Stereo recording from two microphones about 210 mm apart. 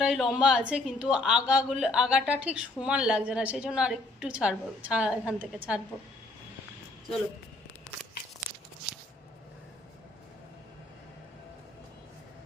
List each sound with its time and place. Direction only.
0.0 s a woman's voice: centre (ahead or behind)